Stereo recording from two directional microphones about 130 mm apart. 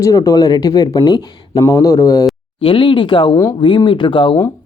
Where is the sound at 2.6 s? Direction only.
40° left (ahead or behind).